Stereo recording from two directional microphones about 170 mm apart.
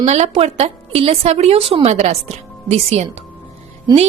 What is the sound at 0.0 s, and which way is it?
A woman's voice, 40° right (ahead or behind).